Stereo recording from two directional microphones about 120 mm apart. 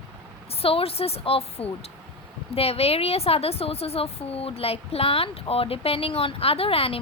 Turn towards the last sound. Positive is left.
turn(degrees=50)  # may be behind; listen again after turning